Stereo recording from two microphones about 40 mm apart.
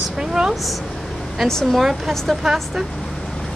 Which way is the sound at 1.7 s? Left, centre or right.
Centre.